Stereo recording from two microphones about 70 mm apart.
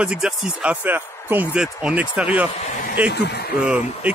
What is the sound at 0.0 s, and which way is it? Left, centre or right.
Speech, centre.